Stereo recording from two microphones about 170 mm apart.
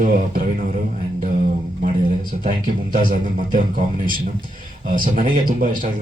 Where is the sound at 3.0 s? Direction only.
50° right (ahead or behind).